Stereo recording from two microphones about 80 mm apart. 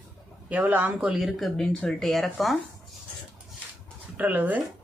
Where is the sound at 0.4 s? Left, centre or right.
Centre.